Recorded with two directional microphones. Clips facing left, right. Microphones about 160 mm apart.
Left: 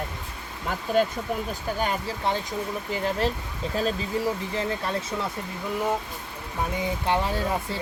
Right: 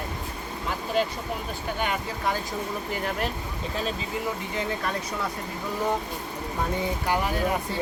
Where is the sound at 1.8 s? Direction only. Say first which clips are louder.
Left 1 dB; 35° left (ahead or behind).